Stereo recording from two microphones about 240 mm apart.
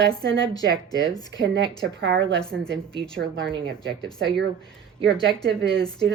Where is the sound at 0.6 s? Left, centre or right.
Centre.